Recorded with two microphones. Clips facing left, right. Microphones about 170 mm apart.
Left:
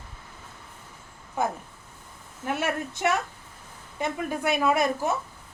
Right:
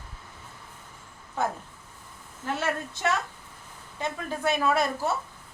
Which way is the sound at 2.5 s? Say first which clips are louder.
Left 1 dB; 15° left (ahead or behind).